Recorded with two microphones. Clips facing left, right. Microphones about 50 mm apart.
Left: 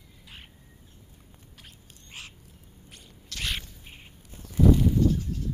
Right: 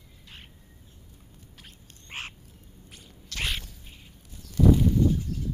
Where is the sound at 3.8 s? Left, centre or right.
Left.